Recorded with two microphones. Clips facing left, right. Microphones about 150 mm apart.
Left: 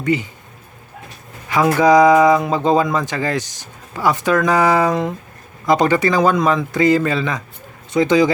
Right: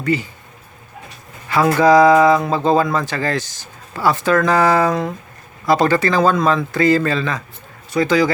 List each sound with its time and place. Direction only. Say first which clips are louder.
0.0 s speech: left 1 dB; 20° left (ahead or behind)
1.5 s speech: even; 15° left (ahead or behind)